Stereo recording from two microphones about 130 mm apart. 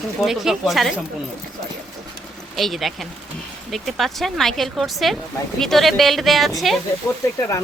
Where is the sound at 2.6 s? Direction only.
Centre (ahead or behind).